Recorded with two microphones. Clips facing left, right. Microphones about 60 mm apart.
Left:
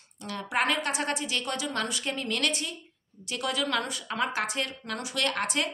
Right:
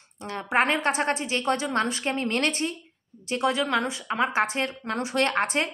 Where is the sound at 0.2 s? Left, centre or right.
Right.